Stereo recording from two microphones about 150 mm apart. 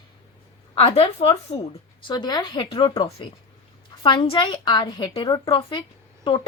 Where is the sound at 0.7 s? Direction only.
40° left (ahead or behind).